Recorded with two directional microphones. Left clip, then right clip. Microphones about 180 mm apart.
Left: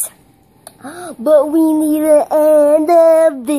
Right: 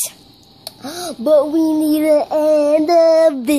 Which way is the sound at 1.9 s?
5° left (ahead or behind).